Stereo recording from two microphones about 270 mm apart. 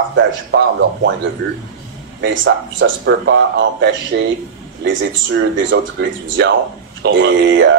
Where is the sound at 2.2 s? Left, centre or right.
Right.